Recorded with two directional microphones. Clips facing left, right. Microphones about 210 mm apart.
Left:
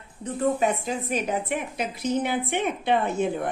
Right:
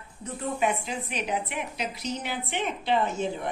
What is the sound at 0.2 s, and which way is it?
A woman's voice, 40° left (ahead or behind).